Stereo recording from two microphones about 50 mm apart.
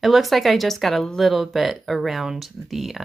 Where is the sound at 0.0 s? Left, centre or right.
Centre.